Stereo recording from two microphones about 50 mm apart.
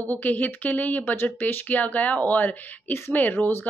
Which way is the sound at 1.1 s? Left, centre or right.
Left.